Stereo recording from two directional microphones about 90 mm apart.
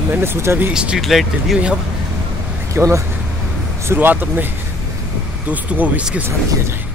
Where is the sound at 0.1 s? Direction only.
25° right (ahead or behind).